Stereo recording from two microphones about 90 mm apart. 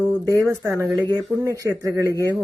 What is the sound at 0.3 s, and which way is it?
Speech, 40° right (ahead or behind).